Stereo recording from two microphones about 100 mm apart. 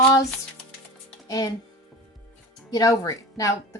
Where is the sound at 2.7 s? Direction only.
40° left (ahead or behind).